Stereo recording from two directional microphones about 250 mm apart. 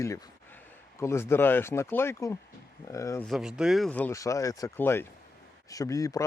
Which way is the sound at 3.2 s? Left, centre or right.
Centre.